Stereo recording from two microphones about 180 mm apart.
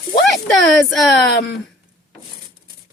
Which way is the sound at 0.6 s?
Centre (ahead or behind).